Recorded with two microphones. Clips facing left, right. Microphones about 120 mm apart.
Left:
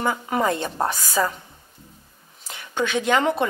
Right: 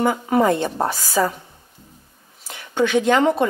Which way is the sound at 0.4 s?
15° right (ahead or behind).